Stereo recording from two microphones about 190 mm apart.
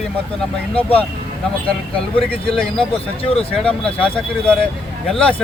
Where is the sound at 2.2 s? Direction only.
5° left (ahead or behind).